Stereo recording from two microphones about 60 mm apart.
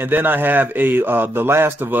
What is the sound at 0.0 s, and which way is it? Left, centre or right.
A man's voice, right.